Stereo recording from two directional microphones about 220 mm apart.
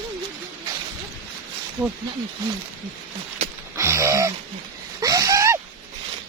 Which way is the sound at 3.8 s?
15° right (ahead or behind).